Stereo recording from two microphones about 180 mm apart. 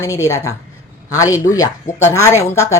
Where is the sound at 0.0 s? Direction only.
15° left (ahead or behind).